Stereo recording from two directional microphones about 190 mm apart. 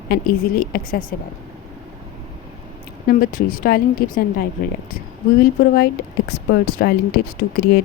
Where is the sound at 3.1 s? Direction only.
45° left (ahead or behind).